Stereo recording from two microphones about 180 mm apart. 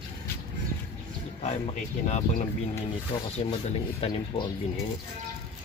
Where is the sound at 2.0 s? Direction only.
40° left (ahead or behind).